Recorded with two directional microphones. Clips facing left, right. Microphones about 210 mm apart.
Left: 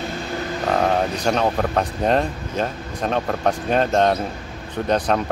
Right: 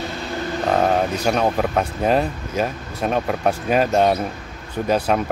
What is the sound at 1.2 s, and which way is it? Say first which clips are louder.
Speech: right 1 dB; 5° right (ahead or behind).